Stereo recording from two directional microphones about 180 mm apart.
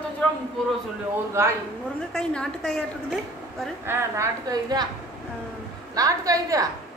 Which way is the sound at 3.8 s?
15° right (ahead or behind).